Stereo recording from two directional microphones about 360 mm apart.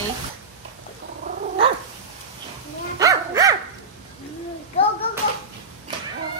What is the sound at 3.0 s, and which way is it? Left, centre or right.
Dog, centre.